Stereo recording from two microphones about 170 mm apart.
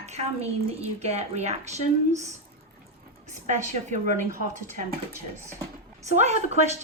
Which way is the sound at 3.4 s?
45° right (ahead or behind).